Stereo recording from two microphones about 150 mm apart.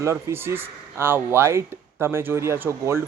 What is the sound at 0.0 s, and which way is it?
Speech, 20° right (ahead or behind).